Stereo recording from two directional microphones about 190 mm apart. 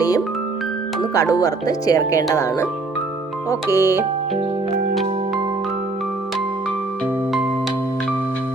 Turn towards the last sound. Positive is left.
turn(degrees=-5)  # may be behind; listen again after turning